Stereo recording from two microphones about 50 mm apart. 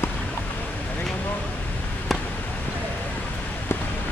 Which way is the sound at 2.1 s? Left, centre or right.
Centre.